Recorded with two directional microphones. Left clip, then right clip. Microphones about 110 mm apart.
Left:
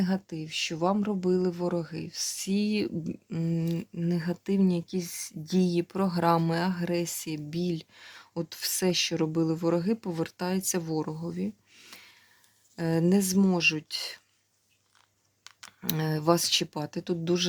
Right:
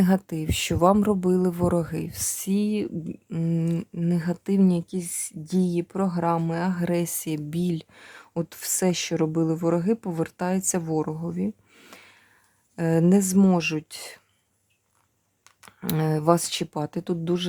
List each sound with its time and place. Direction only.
0.0 s speech: 60° right (ahead or behind)
2.5 s speech: 25° right (ahead or behind)
2.7 s speech: 5° right (ahead or behind)
3.2 s speech: 20° right (ahead or behind)
6.2 s speech: 5° right (ahead or behind)
6.7 s speech: 35° right (ahead or behind)
11.3 s a sound: 35° right (ahead or behind)
12.7 s speech: 35° right (ahead or behind)
15.5 s a sound: 20° right (ahead or behind)
15.8 s speech: 35° right (ahead or behind)